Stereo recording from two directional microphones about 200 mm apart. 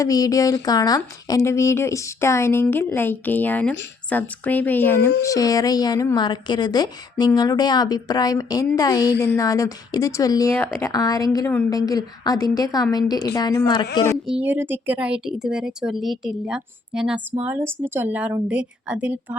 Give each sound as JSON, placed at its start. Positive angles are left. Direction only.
{"t": 0.0, "sound": "a woman's voice", "side_deg": 15}
{"t": 14.3, "sound": "a woman's voice", "side_deg": -5}